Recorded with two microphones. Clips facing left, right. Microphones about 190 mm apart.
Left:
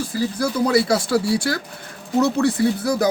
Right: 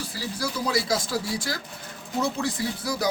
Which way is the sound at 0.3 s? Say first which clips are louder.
Left 8 dB; 55° left (ahead or behind).